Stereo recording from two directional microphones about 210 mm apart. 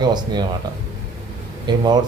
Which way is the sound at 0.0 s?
20° right (ahead or behind).